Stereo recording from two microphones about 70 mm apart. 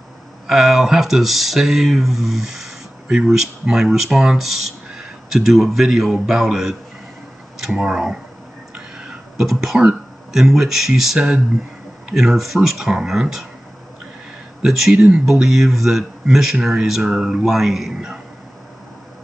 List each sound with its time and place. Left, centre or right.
0.5 s speech: centre
9.4 s speech: centre
14.6 s speech: centre
14.9 s speech: centre
15.1 s speech: centre